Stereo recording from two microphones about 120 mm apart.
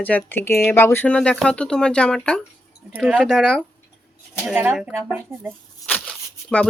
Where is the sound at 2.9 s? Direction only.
10° right (ahead or behind).